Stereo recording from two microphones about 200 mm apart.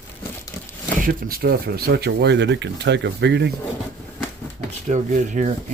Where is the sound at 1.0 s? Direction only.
45° right (ahead or behind).